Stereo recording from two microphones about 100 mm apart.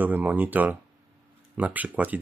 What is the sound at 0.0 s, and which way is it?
Speech, 15° right (ahead or behind).